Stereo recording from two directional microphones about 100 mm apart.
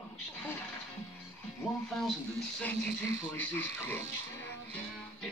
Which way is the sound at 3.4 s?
20° left (ahead or behind).